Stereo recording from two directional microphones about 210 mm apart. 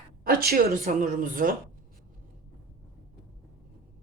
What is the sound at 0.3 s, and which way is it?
Speech, 45° right (ahead or behind).